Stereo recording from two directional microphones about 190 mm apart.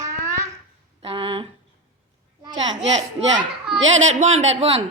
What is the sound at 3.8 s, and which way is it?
Speech, 90° right.